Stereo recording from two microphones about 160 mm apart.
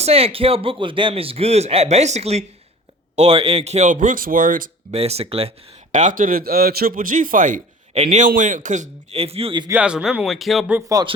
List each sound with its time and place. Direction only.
0.0 s a man's voice: 40° right (ahead or behind); by 4.7 s 55° right (ahead or behind)
4.9 s a man's voice: 40° right (ahead or behind)
5.9 s a man's voice: 50° right (ahead or behind); by 9.6 s 35° right (ahead or behind)
9.6 s speech: 10° right (ahead or behind)
10.7 s speech: 10° right (ahead or behind)